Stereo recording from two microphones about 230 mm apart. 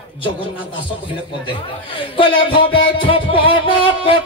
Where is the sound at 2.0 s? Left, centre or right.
Left.